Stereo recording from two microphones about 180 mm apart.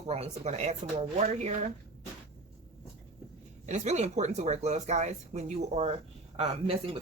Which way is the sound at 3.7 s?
40° right (ahead or behind).